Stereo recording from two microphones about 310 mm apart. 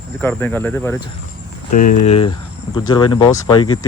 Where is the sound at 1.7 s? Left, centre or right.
Left.